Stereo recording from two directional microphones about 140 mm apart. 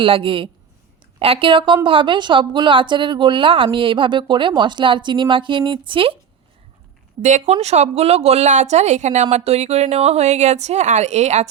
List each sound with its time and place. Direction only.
0.0 s a woman's voice: 40° right (ahead or behind)
7.2 s speech: 60° right (ahead or behind)